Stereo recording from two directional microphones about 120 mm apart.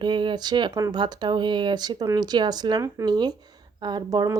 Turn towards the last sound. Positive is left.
turn(degrees=-30)  # may be behind; listen again after turning